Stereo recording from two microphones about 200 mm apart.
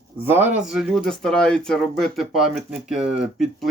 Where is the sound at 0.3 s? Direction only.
10° right (ahead or behind).